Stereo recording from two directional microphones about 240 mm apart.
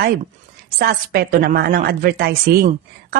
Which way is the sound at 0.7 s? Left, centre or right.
Right.